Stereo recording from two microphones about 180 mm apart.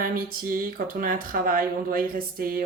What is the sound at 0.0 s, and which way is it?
Speech, 50° right (ahead or behind).